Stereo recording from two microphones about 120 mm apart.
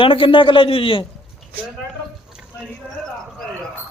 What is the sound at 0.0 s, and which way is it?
Speech, 45° left (ahead or behind).